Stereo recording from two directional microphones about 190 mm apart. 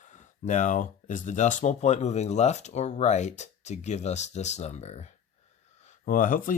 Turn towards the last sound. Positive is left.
turn(degrees=45)  # may be behind; listen again after turning